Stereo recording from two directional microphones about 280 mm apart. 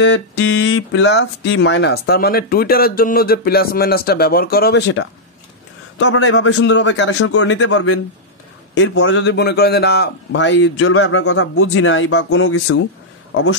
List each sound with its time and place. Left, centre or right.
0.0 s a man's voice: left